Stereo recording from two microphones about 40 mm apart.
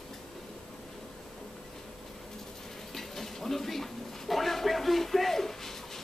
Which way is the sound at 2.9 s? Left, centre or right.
Centre.